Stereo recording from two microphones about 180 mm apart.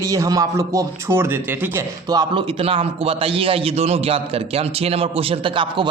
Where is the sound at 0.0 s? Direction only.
20° right (ahead or behind).